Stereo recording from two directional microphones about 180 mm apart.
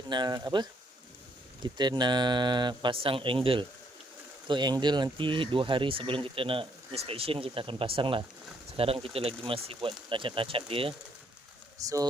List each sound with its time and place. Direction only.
0.1 s speech: 25° right (ahead or behind)
11.8 s speech: 20° right (ahead or behind)